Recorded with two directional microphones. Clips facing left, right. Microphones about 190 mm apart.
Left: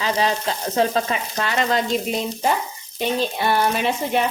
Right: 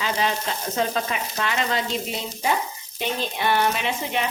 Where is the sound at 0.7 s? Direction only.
35° left (ahead or behind).